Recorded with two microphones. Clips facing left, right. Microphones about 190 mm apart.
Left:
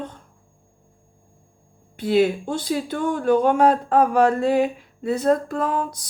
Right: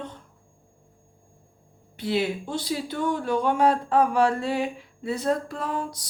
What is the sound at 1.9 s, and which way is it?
Speech, 50° left (ahead or behind).